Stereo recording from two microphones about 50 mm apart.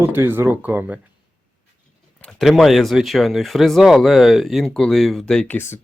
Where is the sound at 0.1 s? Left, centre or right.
Right.